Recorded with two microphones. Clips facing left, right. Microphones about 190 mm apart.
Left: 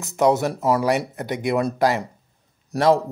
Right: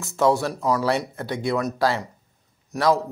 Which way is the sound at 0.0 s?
20° left (ahead or behind).